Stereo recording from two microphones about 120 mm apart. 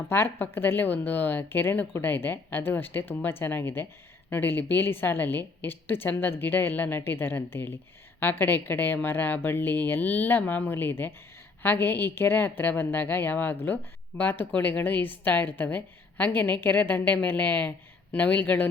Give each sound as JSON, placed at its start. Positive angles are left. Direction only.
{"t": 0.1, "sound": "a woman's voice", "side_deg": 20}